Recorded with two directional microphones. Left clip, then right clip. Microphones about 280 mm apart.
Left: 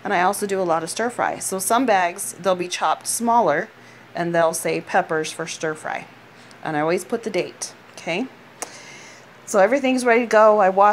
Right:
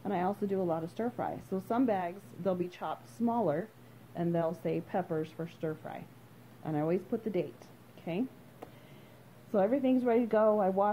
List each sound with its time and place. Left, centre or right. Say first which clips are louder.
0.0 s a woman's voice: left 14 dB; centre
8.0 s speech: left 12 dB; left
9.6 s a woman's voice: left 12 dB; centre